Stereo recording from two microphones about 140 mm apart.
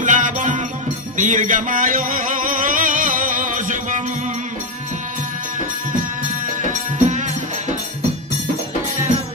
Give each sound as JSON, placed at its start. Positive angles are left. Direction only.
{"t": 0.0, "sound": "music", "side_deg": -65}
{"t": 6.6, "sound": "music", "side_deg": -60}